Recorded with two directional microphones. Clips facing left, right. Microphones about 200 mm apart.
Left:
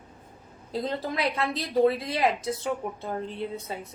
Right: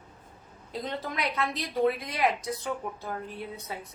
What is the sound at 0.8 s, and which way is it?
A woman's voice, 30° left (ahead or behind).